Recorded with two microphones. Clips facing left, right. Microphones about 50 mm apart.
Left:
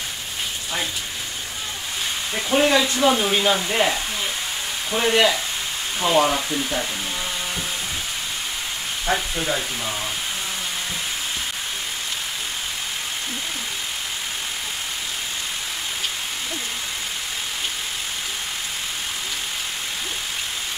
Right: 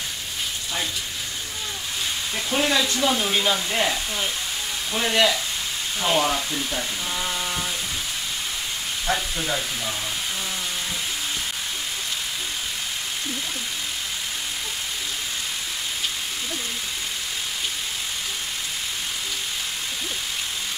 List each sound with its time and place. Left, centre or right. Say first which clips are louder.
2.3 s speech: left 5 dB; centre
9.0 s speech: left 3 dB; centre